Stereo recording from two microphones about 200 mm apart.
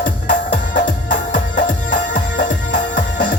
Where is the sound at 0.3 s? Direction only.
45° left (ahead or behind).